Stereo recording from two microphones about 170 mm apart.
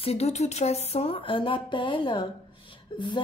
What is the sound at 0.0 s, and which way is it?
Speech, 40° left (ahead or behind).